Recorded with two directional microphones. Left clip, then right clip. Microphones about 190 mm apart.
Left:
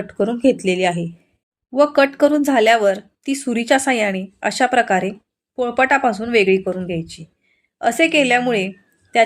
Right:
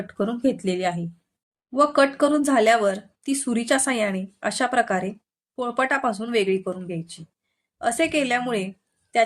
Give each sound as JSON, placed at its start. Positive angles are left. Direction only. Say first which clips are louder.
{"t": 0.1, "sound": "a woman's voice", "louder": "left 8 dB", "side_deg": 10}